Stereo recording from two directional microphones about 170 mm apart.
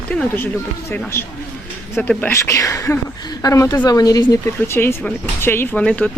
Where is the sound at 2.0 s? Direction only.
10° left (ahead or behind).